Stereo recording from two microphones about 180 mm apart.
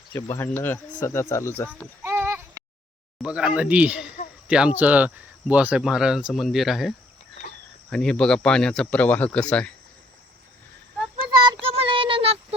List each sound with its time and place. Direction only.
0.1 s speech: 10° left (ahead or behind)
2.0 s a sound: 15° right (ahead or behind)
3.2 s speech: 5° right (ahead or behind)
11.7 s child singing: 30° right (ahead or behind)